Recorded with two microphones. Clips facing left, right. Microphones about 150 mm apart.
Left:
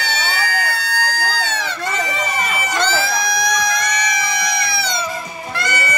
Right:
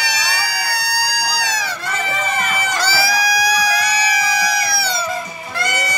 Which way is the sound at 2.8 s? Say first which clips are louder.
Left 1 dB; 10° right (ahead or behind).